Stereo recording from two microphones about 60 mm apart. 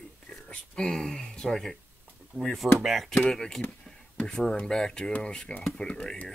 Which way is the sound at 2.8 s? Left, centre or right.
Centre.